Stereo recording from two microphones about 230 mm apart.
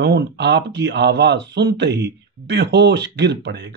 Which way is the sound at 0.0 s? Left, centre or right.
Right.